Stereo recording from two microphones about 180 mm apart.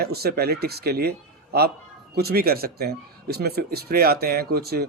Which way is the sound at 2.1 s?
60° right (ahead or behind).